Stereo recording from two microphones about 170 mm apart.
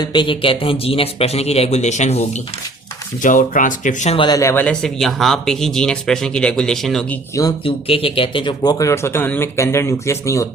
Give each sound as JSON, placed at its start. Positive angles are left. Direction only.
{"t": 0.0, "sound": "a man's voice", "side_deg": 30}
{"t": 3.2, "sound": "speech", "side_deg": 50}
{"t": 4.2, "sound": "speech", "side_deg": 20}
{"t": 7.6, "sound": "speech", "side_deg": 35}